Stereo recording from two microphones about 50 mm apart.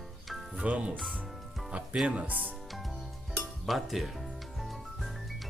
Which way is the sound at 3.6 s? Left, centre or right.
Centre.